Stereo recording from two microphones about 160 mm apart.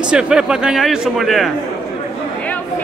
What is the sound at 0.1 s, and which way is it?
A man's voice, 5° right (ahead or behind).